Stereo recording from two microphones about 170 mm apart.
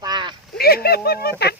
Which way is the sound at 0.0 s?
25° right (ahead or behind).